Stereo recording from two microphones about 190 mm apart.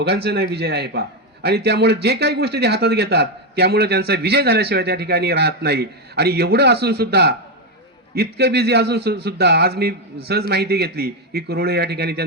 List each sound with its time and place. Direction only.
0.0 s a man's voice: 60° right (ahead or behind)